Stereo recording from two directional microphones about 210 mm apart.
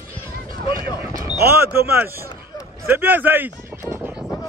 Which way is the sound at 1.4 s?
10° right (ahead or behind).